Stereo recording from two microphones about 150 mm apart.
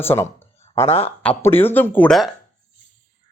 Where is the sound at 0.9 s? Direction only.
40° left (ahead or behind).